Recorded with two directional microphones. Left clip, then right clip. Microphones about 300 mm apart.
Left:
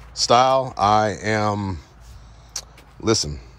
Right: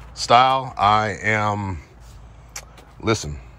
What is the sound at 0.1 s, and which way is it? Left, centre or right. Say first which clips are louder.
A man's voice: right 1 dB; centre.